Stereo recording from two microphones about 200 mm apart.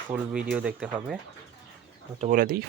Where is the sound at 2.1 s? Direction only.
35° right (ahead or behind).